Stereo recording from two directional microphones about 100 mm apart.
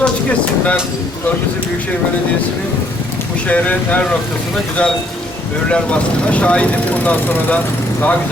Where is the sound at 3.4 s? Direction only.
15° left (ahead or behind).